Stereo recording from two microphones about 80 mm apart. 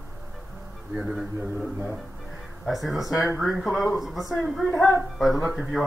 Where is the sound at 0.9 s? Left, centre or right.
Centre.